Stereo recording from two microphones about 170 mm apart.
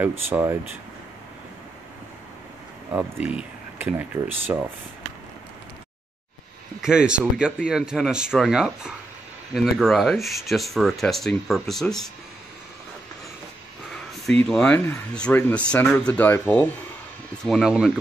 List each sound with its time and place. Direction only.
0.0 s speech: 10° right (ahead or behind)
2.9 s speech: 5° right (ahead or behind)
6.8 s speech: 5° right (ahead or behind)
14.2 s speech: 5° left (ahead or behind)
17.5 s speech: centre (ahead or behind)